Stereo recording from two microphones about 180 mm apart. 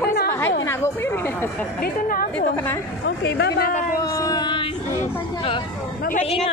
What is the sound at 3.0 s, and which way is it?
Speech, 75° left (ahead or behind).